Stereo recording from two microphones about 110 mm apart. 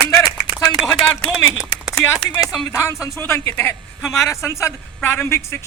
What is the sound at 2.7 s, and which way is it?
A woman's voice, 25° left (ahead or behind).